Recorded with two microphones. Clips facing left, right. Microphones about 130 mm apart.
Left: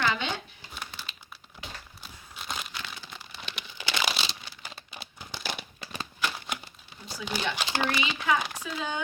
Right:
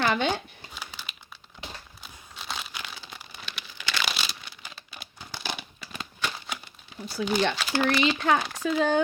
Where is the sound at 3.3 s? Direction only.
25° left (ahead or behind).